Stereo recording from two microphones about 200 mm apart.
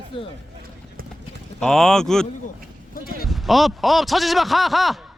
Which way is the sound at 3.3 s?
Centre (ahead or behind).